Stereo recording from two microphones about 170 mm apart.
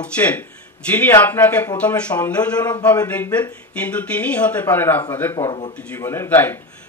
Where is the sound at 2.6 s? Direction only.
25° left (ahead or behind).